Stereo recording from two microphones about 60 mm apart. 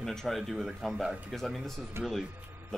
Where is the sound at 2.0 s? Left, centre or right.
Right.